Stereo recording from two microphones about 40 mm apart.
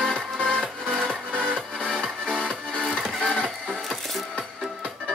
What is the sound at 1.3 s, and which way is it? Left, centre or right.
Music, right.